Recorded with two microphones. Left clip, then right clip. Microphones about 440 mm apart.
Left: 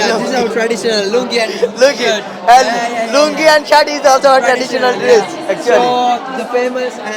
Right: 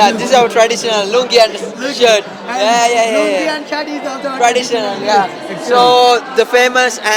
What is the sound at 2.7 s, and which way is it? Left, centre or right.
Speech, right.